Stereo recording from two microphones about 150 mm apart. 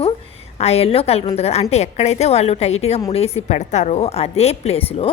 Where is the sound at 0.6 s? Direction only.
45° left (ahead or behind).